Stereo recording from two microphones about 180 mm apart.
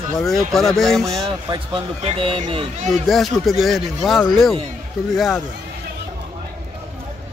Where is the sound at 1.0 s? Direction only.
20° right (ahead or behind).